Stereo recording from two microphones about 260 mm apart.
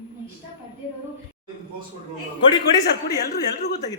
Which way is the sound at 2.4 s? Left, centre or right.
Centre.